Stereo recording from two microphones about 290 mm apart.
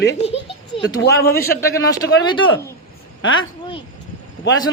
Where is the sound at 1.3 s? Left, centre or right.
Left.